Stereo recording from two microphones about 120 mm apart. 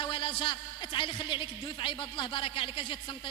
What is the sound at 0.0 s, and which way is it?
A man's voice, 45° left (ahead or behind).